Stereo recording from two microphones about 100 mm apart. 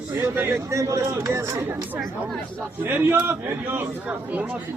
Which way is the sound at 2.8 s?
20° right (ahead or behind).